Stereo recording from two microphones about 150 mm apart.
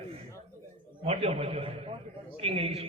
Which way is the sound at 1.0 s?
40° right (ahead or behind).